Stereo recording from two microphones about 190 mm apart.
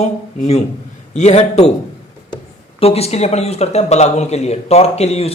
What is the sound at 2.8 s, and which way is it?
A man's voice, 30° left (ahead or behind).